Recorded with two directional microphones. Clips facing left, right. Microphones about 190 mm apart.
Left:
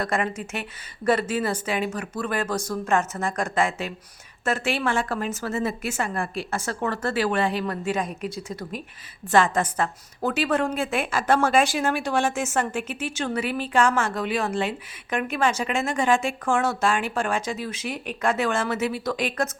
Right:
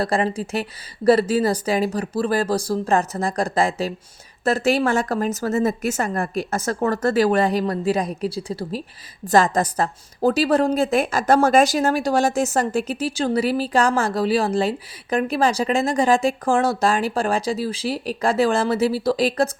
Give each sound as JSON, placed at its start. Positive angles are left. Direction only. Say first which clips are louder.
{"t": 0.0, "sound": "a woman's voice", "louder": "right 5 dB", "side_deg": -30}